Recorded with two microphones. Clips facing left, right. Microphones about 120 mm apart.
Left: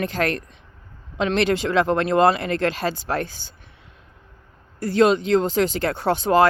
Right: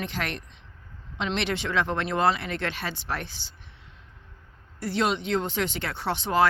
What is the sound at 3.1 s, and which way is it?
Speech, 55° left (ahead or behind).